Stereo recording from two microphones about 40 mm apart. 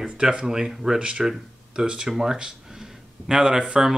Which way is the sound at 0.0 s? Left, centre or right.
Right.